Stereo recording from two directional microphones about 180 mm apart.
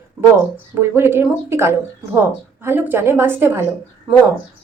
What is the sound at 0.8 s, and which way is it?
Speech, 15° right (ahead or behind).